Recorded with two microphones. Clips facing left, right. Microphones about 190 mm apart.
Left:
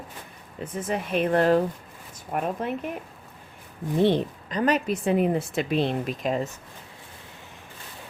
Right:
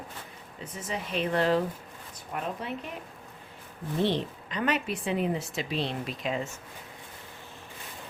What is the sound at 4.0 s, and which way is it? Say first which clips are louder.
A woman's voice: left 6 dB; 50° left (ahead or behind).